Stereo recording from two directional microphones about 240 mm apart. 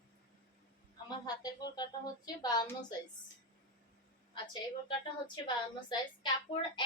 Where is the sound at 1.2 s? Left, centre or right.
Centre.